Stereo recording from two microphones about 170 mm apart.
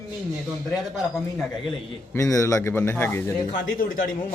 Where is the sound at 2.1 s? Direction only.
20° left (ahead or behind).